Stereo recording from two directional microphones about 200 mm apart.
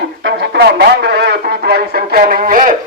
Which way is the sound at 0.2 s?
60° right (ahead or behind).